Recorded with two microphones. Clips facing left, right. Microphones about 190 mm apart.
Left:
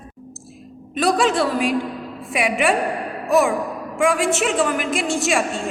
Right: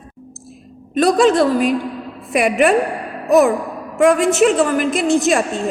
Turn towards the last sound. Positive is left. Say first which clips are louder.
# right 5 dB
turn(degrees=-40)  # may be behind; listen again after turning